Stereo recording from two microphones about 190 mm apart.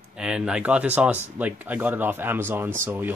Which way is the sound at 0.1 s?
5° right (ahead or behind).